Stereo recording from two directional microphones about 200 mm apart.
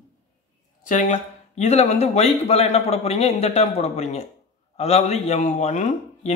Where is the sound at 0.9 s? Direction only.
40° left (ahead or behind).